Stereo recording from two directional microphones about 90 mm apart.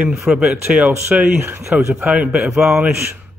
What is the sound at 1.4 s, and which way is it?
Speech, 25° right (ahead or behind).